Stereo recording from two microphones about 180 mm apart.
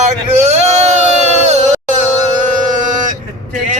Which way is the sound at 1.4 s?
40° right (ahead or behind).